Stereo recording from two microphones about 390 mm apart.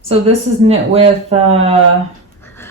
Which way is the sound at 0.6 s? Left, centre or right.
Centre.